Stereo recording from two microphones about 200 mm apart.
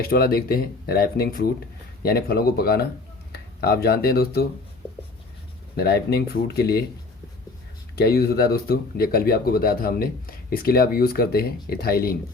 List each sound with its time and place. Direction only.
0.0 s speech: 50° left (ahead or behind)
5.7 s speech: 50° left (ahead or behind)
7.9 s speech: 50° left (ahead or behind)